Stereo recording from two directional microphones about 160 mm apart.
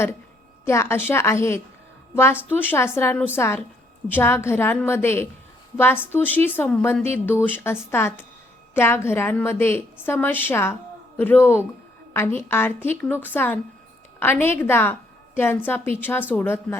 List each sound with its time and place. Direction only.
0.6 s a woman's voice: 15° left (ahead or behind)